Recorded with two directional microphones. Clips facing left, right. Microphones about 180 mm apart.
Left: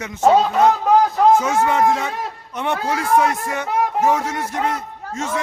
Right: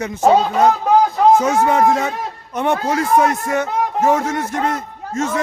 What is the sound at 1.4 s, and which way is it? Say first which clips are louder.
A man's voice: right 3 dB; 40° right (ahead or behind).